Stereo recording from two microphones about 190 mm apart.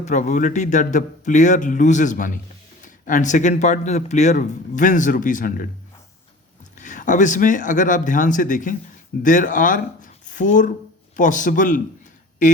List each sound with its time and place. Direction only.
0.0 s speech: 40° left (ahead or behind)
6.7 s speech: 40° left (ahead or behind)